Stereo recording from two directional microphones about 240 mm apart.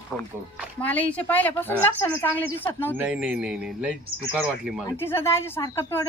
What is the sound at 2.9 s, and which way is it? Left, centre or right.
Speech, centre.